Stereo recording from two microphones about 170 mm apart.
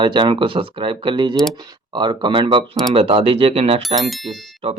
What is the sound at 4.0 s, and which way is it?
Speech, centre (ahead or behind).